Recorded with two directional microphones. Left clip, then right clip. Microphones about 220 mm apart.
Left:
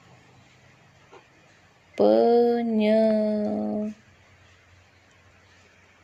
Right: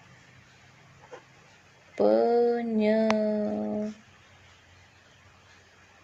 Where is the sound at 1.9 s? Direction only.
20° left (ahead or behind).